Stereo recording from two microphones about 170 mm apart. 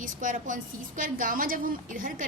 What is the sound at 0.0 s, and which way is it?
A woman's voice, 50° right (ahead or behind).